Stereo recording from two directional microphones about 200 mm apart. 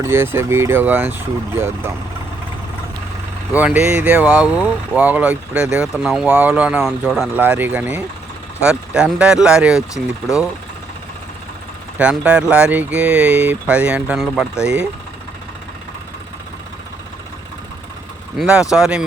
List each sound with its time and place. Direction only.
0.0 s speech: 10° right (ahead or behind)
3.5 s speech: 5° right (ahead or behind)
11.9 s speech: 5° right (ahead or behind)
18.3 s speech: 5° right (ahead or behind)